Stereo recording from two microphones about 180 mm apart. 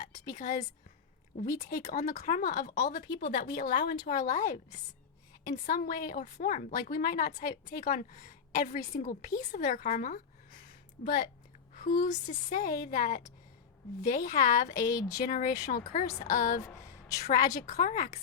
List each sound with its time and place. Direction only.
0.3 s a woman's voice: 50° left (ahead or behind)
1.7 s a woman's voice: 55° left (ahead or behind)
14.8 s speech: 20° left (ahead or behind)
15.2 s a woman's voice: 50° left (ahead or behind)
16.6 s a sound: 20° left (ahead or behind)
17.2 s a woman's voice: 50° left (ahead or behind)